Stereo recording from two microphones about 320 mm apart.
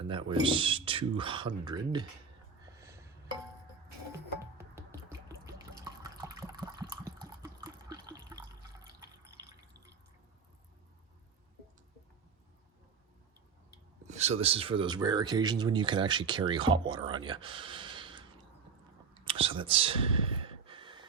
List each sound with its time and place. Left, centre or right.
0.0 s speech: centre
2.7 s a sound: centre
4.5 s drip: centre
7.6 s water: centre
13.7 s speech: right
19.1 s a sound: centre